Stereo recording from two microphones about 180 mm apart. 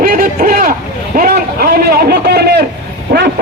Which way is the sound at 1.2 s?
55° right (ahead or behind).